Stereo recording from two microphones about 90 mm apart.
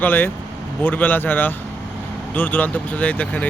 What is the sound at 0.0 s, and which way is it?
Speech, 20° left (ahead or behind).